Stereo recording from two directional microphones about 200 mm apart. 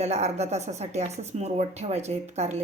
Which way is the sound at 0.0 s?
30° right (ahead or behind).